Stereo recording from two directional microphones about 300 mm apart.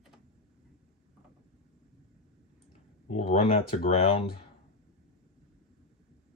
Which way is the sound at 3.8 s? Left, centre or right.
Centre.